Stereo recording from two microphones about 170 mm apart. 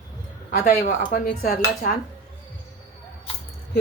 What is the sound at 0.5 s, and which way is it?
A woman's voice, 60° left (ahead or behind).